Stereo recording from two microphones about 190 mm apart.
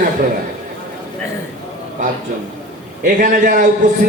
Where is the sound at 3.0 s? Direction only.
45° right (ahead or behind).